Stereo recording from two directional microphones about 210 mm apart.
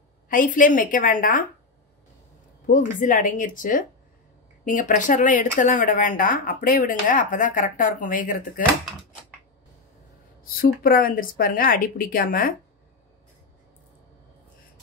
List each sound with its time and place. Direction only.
0.3 s speech: 40° left (ahead or behind)
2.6 s speech: 40° left (ahead or behind)
10.4 s speech: 45° left (ahead or behind)